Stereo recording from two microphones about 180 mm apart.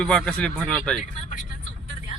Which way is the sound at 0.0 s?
5° left (ahead or behind).